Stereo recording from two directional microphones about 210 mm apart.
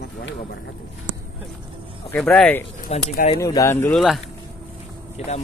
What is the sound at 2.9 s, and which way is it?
Speech, 30° left (ahead or behind).